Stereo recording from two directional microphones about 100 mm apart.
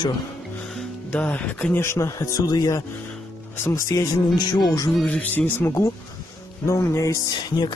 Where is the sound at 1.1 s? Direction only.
15° left (ahead or behind); by 4.9 s 40° left (ahead or behind).